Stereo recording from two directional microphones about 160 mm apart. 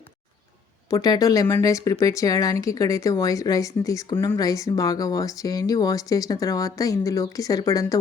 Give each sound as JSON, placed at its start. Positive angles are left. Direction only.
{"t": 0.9, "sound": "speech", "side_deg": 25}